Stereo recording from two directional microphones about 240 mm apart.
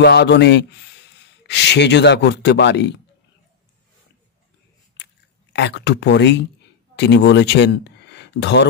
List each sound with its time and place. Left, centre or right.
0.0 s speech: left
5.5 s speech: left